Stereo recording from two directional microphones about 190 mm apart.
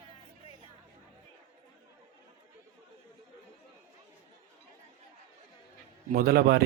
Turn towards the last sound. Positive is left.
turn(degrees=-55)  # may be behind; listen again after turning